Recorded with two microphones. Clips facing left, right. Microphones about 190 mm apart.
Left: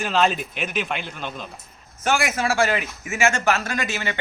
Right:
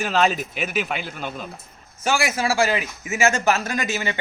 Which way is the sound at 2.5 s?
15° right (ahead or behind).